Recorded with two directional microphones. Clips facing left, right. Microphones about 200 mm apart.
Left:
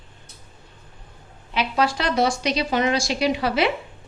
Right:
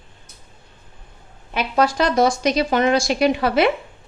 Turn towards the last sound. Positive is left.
turn(degrees=-50)  # may be behind; listen again after turning